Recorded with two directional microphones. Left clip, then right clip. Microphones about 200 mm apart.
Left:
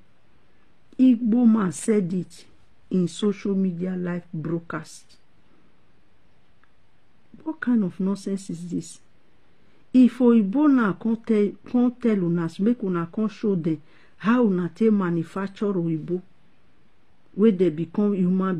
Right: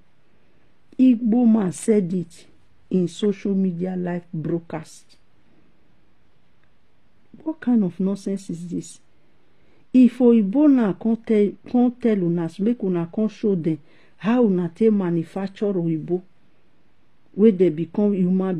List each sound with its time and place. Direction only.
0.8 s speech: 5° right (ahead or behind)
7.4 s speech: 10° right (ahead or behind)
17.4 s speech: 5° right (ahead or behind)